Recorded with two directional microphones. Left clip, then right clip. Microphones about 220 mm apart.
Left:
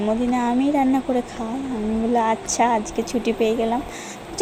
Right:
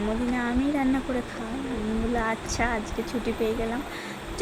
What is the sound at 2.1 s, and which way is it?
A woman's voice, 20° left (ahead or behind).